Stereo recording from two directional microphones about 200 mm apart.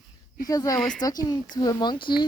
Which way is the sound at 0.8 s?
5° left (ahead or behind).